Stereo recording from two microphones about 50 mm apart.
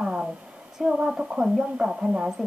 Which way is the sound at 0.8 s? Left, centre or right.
Centre.